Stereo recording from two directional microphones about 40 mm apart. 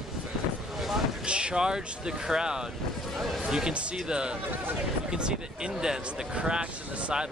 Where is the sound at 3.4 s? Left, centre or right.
Centre.